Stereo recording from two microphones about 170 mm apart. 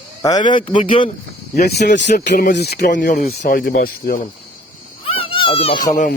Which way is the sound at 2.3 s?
50° left (ahead or behind).